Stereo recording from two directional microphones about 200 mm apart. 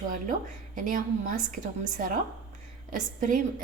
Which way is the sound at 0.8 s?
40° right (ahead or behind).